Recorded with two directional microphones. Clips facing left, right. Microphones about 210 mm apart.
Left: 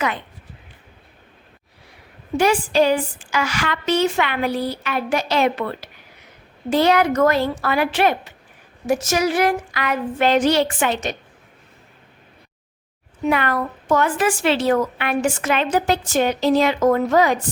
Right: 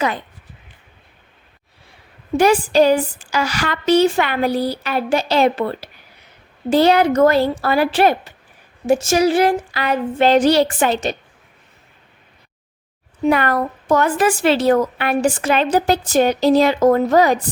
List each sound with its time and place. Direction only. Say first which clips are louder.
2.4 s a woman's voice: right 4 dB; 40° right (ahead or behind)
13.2 s a woman's voice: right 4 dB; 40° right (ahead or behind)